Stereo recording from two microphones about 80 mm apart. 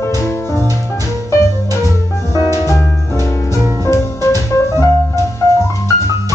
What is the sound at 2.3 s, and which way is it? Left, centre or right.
Music, right.